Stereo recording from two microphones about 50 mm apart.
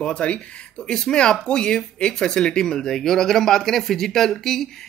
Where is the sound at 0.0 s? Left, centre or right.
Left.